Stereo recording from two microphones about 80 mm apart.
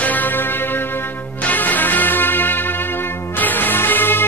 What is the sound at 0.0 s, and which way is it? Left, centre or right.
Music, left.